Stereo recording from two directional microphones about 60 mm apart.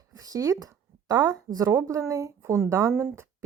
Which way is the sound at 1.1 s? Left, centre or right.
Right.